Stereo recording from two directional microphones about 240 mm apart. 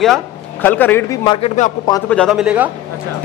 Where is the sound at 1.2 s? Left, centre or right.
Left.